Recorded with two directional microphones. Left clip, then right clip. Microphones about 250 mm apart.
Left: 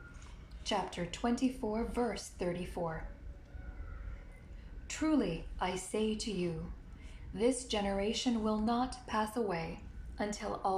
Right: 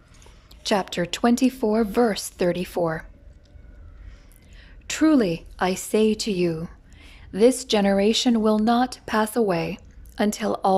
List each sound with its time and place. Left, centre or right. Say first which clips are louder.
0.6 s speech: right 12 dB; right
4.9 s speech: right 14 dB; right